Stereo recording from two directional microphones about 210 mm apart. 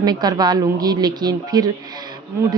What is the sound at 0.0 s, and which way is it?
A woman's voice, 20° right (ahead or behind).